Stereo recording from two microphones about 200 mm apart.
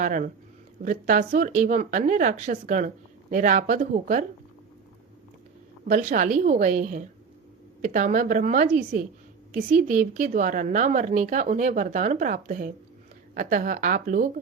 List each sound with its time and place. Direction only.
0.0 s speech: 40° right (ahead or behind)
5.9 s a woman's voice: 40° right (ahead or behind)